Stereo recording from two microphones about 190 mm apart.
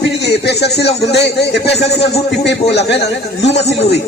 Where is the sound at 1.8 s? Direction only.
35° left (ahead or behind).